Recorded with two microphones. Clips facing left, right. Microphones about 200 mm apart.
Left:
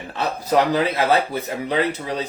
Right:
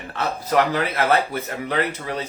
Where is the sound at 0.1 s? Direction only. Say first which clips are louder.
Left 2 dB; 15° left (ahead or behind).